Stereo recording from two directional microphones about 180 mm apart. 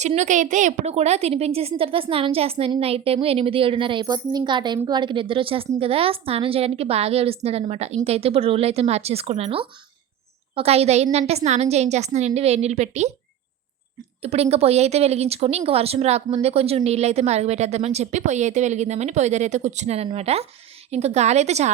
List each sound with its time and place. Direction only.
0.0 s a woman's voice: 40° right (ahead or behind)
14.2 s a woman's voice: 35° right (ahead or behind)